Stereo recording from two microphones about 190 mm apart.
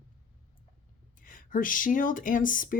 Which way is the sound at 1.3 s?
45° left (ahead or behind).